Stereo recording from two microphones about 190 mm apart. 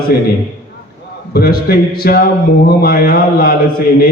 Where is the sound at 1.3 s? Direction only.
55° left (ahead or behind).